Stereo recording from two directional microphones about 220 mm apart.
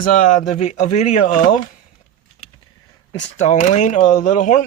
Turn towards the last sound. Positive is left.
turn(degrees=35)  # may be behind; listen again after turning